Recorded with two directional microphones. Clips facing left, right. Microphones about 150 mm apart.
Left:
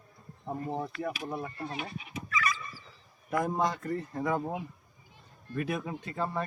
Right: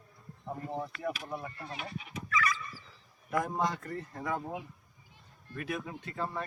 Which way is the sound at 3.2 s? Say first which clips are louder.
Left 2 dB; 25° left (ahead or behind).